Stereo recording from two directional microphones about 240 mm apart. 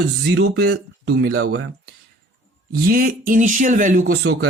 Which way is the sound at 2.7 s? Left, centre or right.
Right.